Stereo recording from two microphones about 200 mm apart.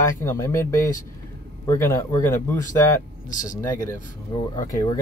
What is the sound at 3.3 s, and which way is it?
Speech, 40° left (ahead or behind).